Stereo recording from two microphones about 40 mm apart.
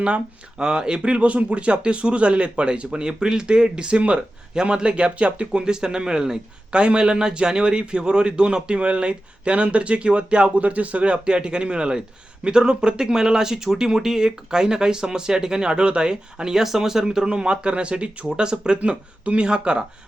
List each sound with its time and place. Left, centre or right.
0.6 s a man's voice: right
5.5 s a man's voice: centre
18.8 s a man's voice: right